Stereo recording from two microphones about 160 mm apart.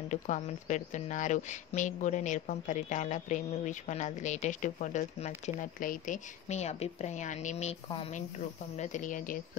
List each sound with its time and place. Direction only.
0.1 s speech: 50° left (ahead or behind)
8.7 s speech: 50° left (ahead or behind)